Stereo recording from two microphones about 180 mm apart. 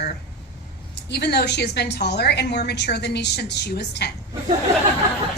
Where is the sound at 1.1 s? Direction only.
65° left (ahead or behind).